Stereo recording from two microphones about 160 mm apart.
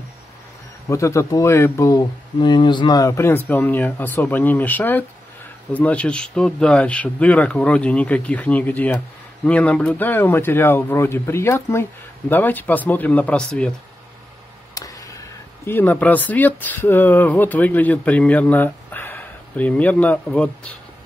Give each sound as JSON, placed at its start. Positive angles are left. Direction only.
{"t": 0.8, "sound": "speech", "side_deg": 20}
{"t": 14.7, "sound": "a sound", "side_deg": 20}
{"t": 15.6, "sound": "speech", "side_deg": 10}